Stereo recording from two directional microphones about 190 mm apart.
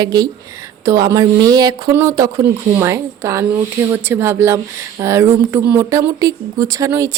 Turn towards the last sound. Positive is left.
turn(degrees=-15)  # may be behind; listen again after turning